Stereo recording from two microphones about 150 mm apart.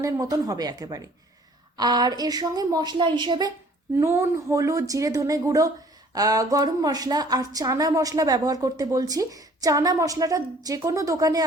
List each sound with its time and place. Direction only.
0.0 s a woman's voice: 25° right (ahead or behind)
3.9 s a woman's voice: 20° right (ahead or behind)